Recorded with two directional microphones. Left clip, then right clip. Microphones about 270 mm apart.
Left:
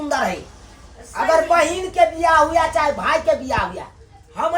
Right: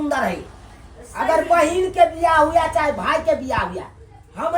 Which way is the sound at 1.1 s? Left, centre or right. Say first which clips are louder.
Left 1 dB; centre.